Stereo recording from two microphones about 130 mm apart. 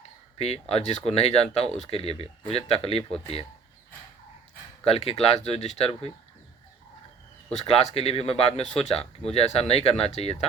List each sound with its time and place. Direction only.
0.3 s speech: 50° left (ahead or behind)
4.9 s speech: 50° left (ahead or behind)
7.7 s speech: 50° left (ahead or behind)